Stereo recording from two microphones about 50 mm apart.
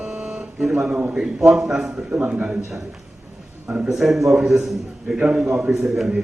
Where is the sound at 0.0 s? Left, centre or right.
Right.